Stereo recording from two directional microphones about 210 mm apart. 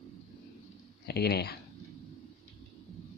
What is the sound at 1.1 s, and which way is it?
Speech, 50° left (ahead or behind).